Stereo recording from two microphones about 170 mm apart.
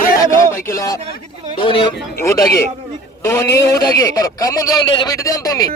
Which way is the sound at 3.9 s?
20° left (ahead or behind).